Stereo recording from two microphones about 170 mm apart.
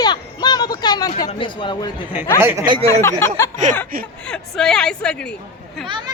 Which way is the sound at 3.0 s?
15° left (ahead or behind).